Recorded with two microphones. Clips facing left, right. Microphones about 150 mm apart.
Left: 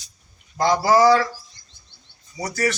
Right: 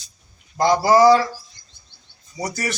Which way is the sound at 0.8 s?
15° right (ahead or behind).